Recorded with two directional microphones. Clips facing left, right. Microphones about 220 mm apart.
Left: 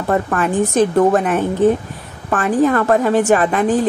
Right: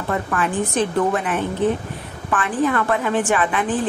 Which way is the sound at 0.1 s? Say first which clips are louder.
Left 5 dB; 45° left (ahead or behind).